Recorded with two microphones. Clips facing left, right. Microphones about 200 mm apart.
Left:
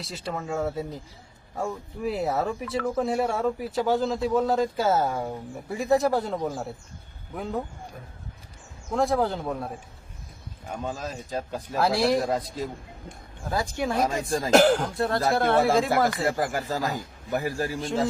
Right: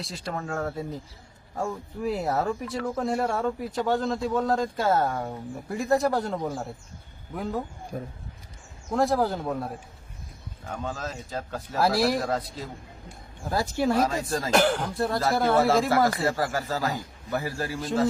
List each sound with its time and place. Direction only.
0.0 s speech: centre (ahead or behind)
7.9 s speech: 40° right (ahead or behind)
8.9 s speech: centre (ahead or behind)
10.7 s a man's voice: 15° left (ahead or behind)
11.8 s speech: 5° right (ahead or behind)
12.2 s a man's voice: 15° left (ahead or behind)
13.4 s speech: 5° right (ahead or behind)
14.0 s speech: 20° left (ahead or behind)
14.7 s speech: centre (ahead or behind)
16.2 s a man's voice: 15° left (ahead or behind)